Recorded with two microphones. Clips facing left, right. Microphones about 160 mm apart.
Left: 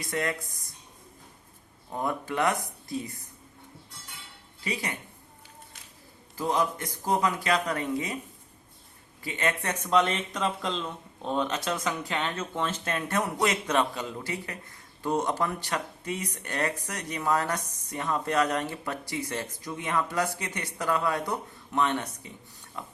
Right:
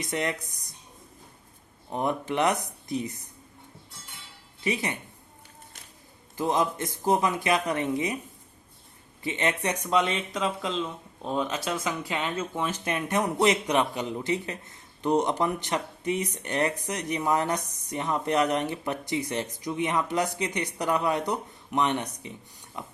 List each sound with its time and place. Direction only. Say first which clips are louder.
0.0 s speech: right 1 dB; 20° right (ahead or behind)
1.9 s speech: right 3 dB; 20° right (ahead or behind)
4.6 s speech: right 4 dB; 20° right (ahead or behind)
6.3 s speech: right 2 dB; 20° right (ahead or behind)
9.2 s speech: right 2 dB; 20° right (ahead or behind)
10.0 s speech: even; centre (ahead or behind); by 22.3 s 20° right (ahead or behind)
22.8 s pig: right 1 dB; 20° right (ahead or behind)